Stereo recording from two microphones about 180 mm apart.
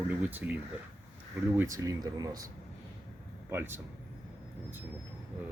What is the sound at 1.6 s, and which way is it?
Speech, 15° right (ahead or behind).